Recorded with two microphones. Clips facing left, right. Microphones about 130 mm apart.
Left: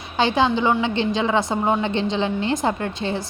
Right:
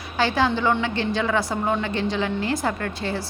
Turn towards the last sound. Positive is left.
turn(degrees=20)  # may be behind; listen again after turning